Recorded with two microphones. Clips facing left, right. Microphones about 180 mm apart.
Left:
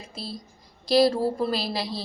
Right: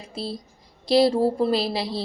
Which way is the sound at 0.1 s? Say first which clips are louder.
Right 7 dB; 25° right (ahead or behind).